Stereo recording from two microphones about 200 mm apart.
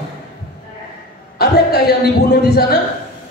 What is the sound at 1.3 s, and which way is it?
Speech, 50° left (ahead or behind).